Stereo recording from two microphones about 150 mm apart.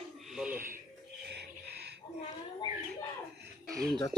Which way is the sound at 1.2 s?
90° right.